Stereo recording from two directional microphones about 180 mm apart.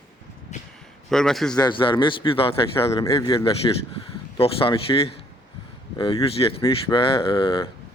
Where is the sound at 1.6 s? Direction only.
25° left (ahead or behind).